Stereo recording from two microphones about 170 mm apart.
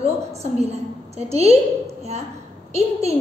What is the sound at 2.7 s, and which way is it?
Speech, 40° right (ahead or behind).